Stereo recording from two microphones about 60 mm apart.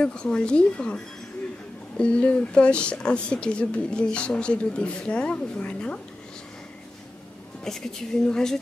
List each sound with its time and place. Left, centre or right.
0.0 s speech: centre
7.6 s speech: centre